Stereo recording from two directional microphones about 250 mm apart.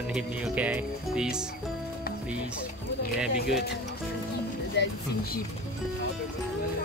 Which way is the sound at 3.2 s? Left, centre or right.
Centre.